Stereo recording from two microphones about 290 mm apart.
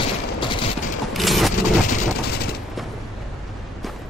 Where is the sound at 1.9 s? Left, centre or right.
Left.